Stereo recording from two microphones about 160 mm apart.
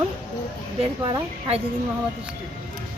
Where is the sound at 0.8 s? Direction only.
35° right (ahead or behind).